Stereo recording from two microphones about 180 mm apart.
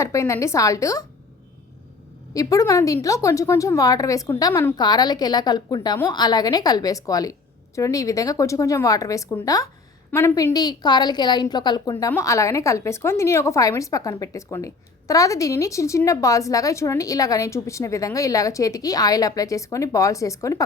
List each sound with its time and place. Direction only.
0.0 s a woman's voice: 15° left (ahead or behind)
2.3 s a woman's voice: 20° left (ahead or behind)